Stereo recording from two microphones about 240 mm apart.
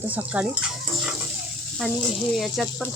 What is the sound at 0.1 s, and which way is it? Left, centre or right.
Speech, centre.